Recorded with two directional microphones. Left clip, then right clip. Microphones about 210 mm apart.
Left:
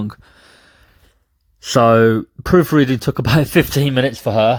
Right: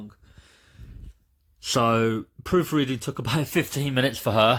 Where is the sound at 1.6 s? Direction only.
20° left (ahead or behind).